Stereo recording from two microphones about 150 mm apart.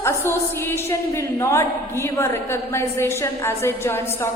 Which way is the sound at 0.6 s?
15° left (ahead or behind).